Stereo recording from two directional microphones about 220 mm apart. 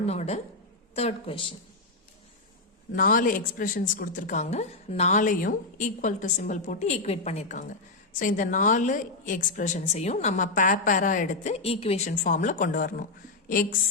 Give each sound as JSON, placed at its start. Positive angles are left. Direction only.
{"t": 0.0, "sound": "speech", "side_deg": 30}
{"t": 2.9, "sound": "a woman's voice", "side_deg": 40}